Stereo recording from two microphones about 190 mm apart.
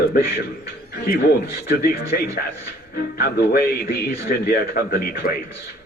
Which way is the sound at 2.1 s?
50° left (ahead or behind).